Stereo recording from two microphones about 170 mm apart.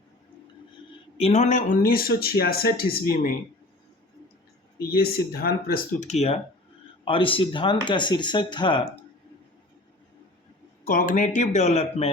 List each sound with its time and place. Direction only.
1.2 s speech: 40° left (ahead or behind); by 3.3 s 60° left (ahead or behind)
4.8 s speech: 65° left (ahead or behind); by 6.3 s 40° left (ahead or behind)
7.0 s speech: 30° left (ahead or behind)
10.8 s speech: 50° left (ahead or behind)